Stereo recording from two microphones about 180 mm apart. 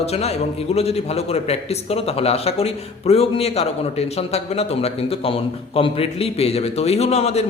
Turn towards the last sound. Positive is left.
turn(degrees=35)  # may be behind; listen again after turning